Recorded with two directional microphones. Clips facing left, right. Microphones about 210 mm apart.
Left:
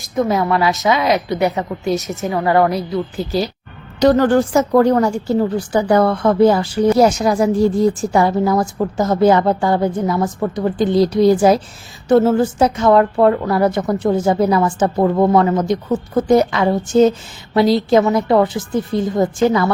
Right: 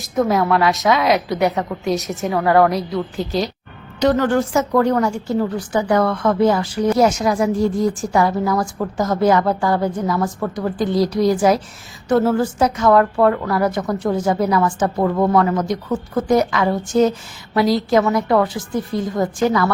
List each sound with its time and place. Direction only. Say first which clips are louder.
0.0 s a woman's voice: even; centre (ahead or behind)
4.0 s speech: left 4 dB; 35° left (ahead or behind)